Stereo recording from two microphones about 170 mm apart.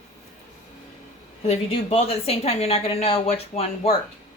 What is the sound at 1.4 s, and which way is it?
A woman's voice, 35° left (ahead or behind).